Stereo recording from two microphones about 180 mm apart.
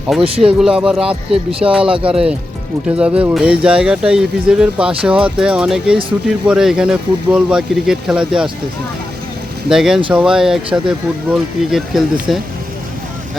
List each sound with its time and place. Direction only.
0.1 s speech: centre (ahead or behind)
1.5 s speech: 30° right (ahead or behind)
3.0 s speech: 5° right (ahead or behind)
9.6 s speech: 5° right (ahead or behind)